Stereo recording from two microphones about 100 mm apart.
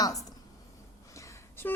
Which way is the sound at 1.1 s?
30° left (ahead or behind).